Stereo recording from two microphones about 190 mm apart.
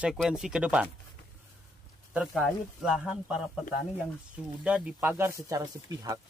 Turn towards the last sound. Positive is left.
turn(degrees=-20)  # may be behind; listen again after turning